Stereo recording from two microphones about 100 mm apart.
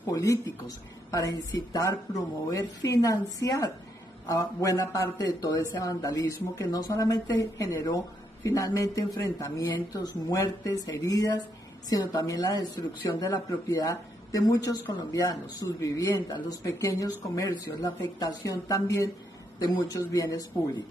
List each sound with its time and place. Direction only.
0.0 s speech: 35° left (ahead or behind)
6.7 s speech: 40° left (ahead or behind)
18.2 s speech: 35° left (ahead or behind)